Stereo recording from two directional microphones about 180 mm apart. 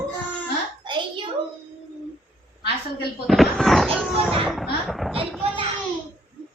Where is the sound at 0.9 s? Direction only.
25° right (ahead or behind).